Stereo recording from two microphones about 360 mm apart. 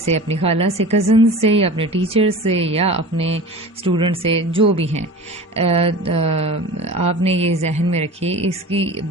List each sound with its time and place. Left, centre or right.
0.0 s a woman's voice: centre